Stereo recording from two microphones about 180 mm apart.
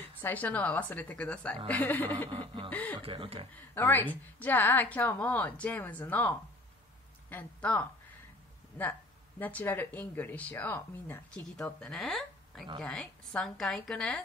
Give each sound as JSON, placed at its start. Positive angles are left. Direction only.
{"t": 0.0, "sound": "speech", "side_deg": 10}
{"t": 2.3, "sound": "speech", "side_deg": -30}
{"t": 2.7, "sound": "speech", "side_deg": 10}
{"t": 3.0, "sound": "speech", "side_deg": -30}
{"t": 3.7, "sound": "speech", "side_deg": 10}
{"t": 9.4, "sound": "a woman's voice", "side_deg": 10}